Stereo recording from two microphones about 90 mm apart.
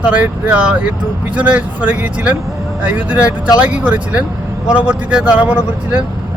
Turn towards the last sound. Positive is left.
turn(degrees=-20)  # may be behind; listen again after turning